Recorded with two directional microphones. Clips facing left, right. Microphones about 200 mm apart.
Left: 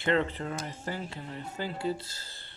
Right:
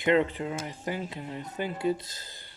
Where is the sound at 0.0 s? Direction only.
15° right (ahead or behind).